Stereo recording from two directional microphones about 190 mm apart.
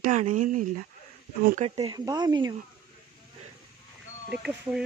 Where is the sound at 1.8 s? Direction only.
20° right (ahead or behind).